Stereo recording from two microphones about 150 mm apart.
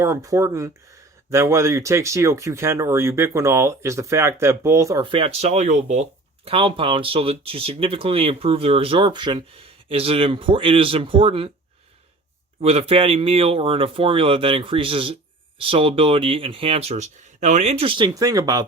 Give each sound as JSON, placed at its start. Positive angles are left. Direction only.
{"t": 0.0, "sound": "speech", "side_deg": -20}
{"t": 5.0, "sound": "speech", "side_deg": -40}
{"t": 12.6, "sound": "speech", "side_deg": -40}